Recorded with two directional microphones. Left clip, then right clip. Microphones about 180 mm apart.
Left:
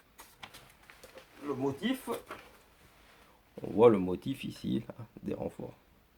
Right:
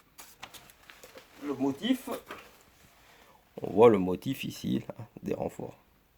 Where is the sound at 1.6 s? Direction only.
45° right (ahead or behind).